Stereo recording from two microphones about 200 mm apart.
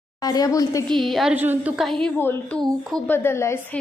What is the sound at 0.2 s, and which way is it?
Speech, 20° left (ahead or behind).